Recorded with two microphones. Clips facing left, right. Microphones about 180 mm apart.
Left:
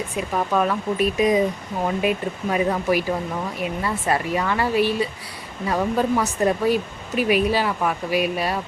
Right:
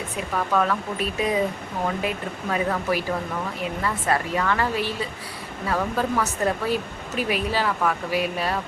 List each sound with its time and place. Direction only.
0.3 s speech: 15° left (ahead or behind)